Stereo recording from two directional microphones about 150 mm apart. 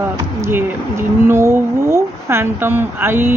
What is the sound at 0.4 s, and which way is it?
Speech, 15° right (ahead or behind).